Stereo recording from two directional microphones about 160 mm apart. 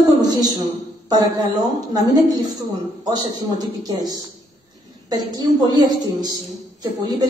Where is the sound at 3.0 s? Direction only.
25° right (ahead or behind).